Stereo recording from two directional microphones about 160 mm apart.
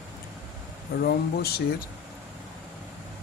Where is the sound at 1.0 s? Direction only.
80° left.